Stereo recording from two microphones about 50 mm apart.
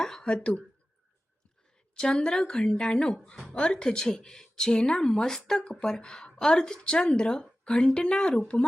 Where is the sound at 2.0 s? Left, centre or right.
Centre.